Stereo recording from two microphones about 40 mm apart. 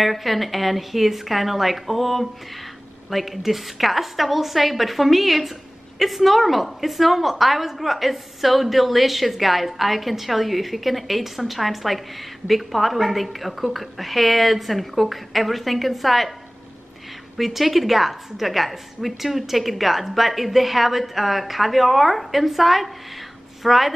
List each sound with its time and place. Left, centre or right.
0.0 s a woman's voice: centre
17.4 s a woman's voice: centre